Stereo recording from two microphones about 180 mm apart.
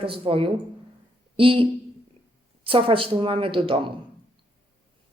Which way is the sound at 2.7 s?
30° right (ahead or behind).